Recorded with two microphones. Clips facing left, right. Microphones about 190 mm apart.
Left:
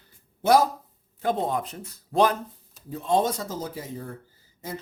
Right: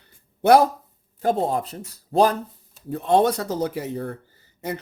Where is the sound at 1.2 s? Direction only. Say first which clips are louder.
Right 4 dB; 40° right (ahead or behind).